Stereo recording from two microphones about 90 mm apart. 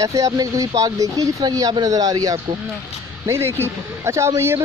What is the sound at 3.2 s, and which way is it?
Speech, 30° right (ahead or behind).